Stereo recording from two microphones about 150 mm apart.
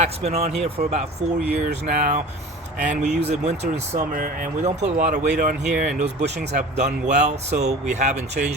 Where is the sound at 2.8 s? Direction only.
50° right (ahead or behind).